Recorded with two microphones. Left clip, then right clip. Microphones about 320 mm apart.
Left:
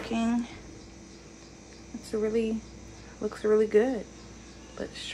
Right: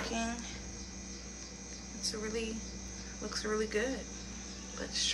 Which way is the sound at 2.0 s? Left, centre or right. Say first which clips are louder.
Left 9 dB; centre.